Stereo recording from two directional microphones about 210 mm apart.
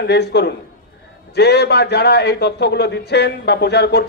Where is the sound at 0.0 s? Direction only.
50° left (ahead or behind).